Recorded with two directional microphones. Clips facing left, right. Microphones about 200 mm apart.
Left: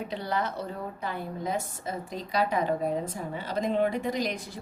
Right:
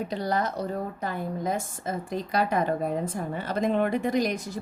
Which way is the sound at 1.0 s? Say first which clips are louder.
Right 2 dB; 45° right (ahead or behind).